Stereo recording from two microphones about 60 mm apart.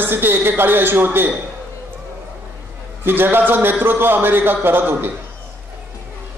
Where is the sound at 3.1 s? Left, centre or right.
Right.